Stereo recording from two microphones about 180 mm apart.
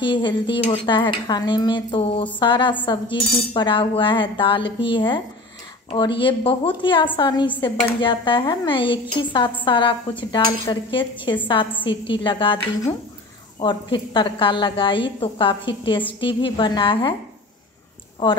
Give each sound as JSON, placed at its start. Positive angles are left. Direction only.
{"t": 0.0, "sound": "speech", "side_deg": 25}